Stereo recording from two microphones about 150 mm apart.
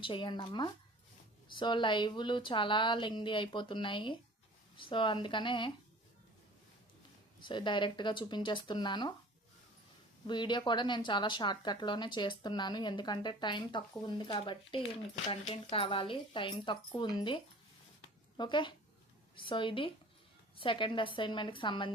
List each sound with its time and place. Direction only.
0.0 s speech: 35° left (ahead or behind)
7.4 s speech: 30° left (ahead or behind)
10.2 s speech: 30° left (ahead or behind)